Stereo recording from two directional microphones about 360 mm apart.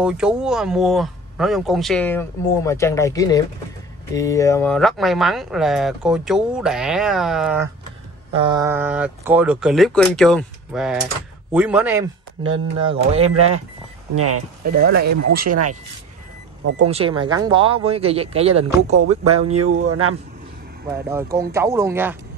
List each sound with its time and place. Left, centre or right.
0.0 s speech: centre
8.3 s speech: centre
12.8 s speech: centre
14.1 s speech: right
16.6 s speech: right
16.9 s speech: centre
20.8 s speech: centre